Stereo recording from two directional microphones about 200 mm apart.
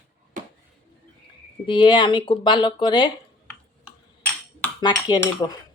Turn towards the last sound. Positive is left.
turn(degrees=20)  # may be behind; listen again after turning